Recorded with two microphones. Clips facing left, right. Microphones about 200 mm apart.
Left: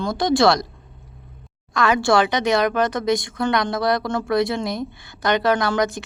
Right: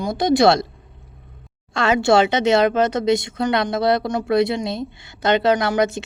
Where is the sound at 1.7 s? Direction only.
25° right (ahead or behind).